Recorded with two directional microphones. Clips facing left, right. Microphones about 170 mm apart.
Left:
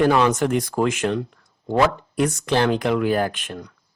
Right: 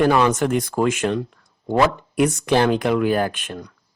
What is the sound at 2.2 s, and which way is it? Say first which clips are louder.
Speech: right 3 dB; 15° right (ahead or behind).